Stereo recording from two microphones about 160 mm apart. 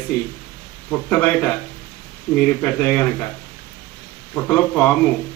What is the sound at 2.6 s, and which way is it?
Speech, 10° left (ahead or behind).